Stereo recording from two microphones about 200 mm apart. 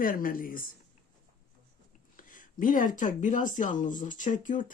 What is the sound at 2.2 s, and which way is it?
Speech, 40° left (ahead or behind).